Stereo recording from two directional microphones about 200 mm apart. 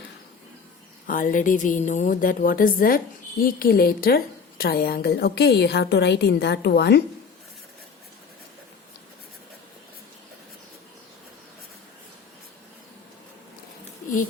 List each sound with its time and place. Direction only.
1.0 s a woman's voice: 45° left (ahead or behind)